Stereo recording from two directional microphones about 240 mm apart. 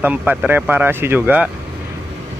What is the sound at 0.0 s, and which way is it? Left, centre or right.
Mantra, centre.